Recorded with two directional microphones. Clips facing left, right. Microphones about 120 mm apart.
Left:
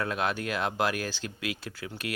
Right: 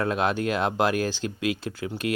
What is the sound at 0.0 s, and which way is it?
Speech, 30° right (ahead or behind).